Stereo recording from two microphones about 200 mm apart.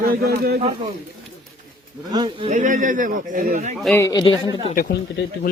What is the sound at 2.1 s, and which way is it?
Speech, 20° right (ahead or behind).